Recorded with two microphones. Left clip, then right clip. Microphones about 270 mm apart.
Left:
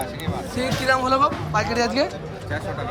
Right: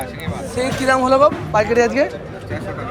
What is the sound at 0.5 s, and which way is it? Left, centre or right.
Speech, centre.